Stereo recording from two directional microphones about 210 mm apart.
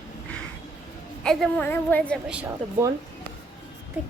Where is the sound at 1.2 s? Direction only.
Centre (ahead or behind).